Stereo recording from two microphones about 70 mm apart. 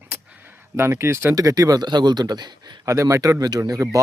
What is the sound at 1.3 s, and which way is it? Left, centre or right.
A man's voice, right.